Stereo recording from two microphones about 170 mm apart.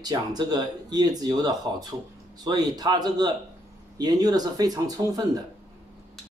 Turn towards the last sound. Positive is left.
turn(degrees=-20)  # may be behind; listen again after turning